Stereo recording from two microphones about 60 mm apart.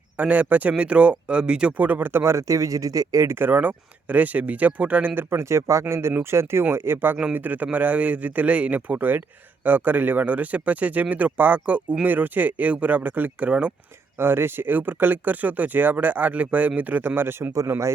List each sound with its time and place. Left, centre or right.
0.2 s speech: right
1.8 s speech: right
2.3 s speech: right
3.2 s speech: right
5.1 s a man's voice: right; by 13.7 s centre
14.2 s speech: right
17.7 s a man's voice: right